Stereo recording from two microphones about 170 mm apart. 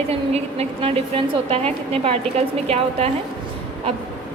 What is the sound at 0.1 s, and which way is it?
A woman's voice, 40° right (ahead or behind).